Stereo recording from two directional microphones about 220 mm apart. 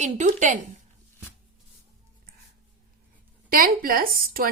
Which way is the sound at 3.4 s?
40° right (ahead or behind).